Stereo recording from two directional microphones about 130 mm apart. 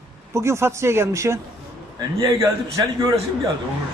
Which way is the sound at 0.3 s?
20° right (ahead or behind).